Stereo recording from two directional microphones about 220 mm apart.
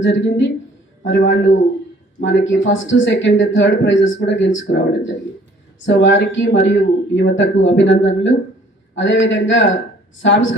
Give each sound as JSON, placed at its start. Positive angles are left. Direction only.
{"t": 0.0, "sound": "speech", "side_deg": 60}
{"t": 5.8, "sound": "speech", "side_deg": 55}